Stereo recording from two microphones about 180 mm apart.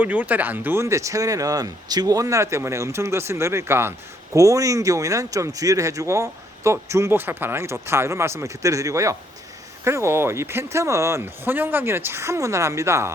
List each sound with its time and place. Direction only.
0.0 s speech: 10° right (ahead or behind)